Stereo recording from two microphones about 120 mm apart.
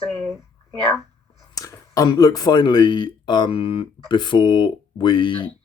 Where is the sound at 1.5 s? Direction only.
30° left (ahead or behind).